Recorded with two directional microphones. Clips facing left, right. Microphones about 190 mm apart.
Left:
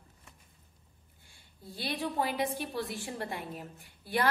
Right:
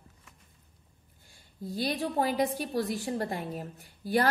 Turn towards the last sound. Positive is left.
turn(degrees=-40)  # may be behind; listen again after turning